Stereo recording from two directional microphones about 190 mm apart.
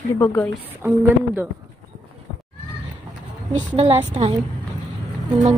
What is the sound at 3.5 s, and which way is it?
Speech, 30° right (ahead or behind).